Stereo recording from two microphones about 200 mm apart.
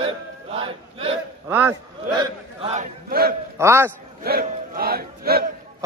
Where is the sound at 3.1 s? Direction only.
50° right (ahead or behind).